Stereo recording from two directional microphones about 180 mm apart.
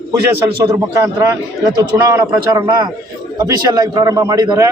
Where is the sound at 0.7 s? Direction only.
20° right (ahead or behind).